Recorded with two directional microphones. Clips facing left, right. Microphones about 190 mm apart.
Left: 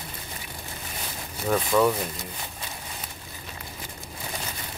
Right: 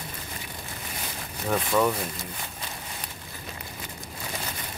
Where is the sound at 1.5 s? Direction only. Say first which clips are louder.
Left 2 dB; centre (ahead or behind).